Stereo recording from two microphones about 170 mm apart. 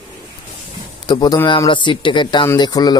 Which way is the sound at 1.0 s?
25° left (ahead or behind).